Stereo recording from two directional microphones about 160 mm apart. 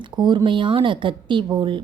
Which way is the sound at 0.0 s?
30° right (ahead or behind).